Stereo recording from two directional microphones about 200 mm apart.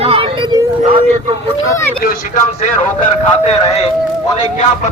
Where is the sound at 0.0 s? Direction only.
30° right (ahead or behind).